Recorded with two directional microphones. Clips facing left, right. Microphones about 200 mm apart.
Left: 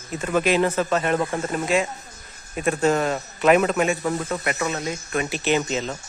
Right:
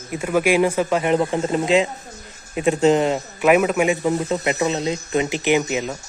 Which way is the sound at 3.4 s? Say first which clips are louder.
Right 2 dB; 10° right (ahead or behind).